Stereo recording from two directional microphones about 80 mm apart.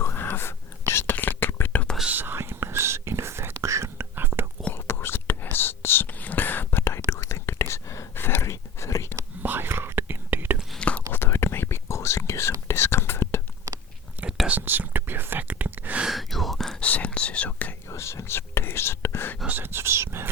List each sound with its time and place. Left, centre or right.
0.0 s whispering: left
2.0 s whispering: right
4.7 s whispering: left
9.4 s whispering: right
10.8 s whispering: centre
11.1 s whispering: left
14.6 s whispering: right
16.0 s gasp: centre
16.8 s whispering: centre
17.8 s whispering: left
19.5 s whispering: right